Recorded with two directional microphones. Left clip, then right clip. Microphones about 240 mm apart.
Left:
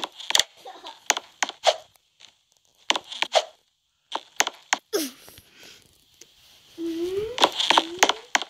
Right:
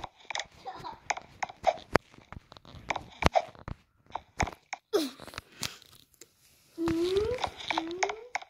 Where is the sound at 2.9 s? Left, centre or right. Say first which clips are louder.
Left 5 dB; left.